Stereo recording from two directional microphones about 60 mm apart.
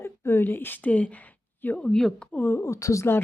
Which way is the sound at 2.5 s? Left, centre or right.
Left.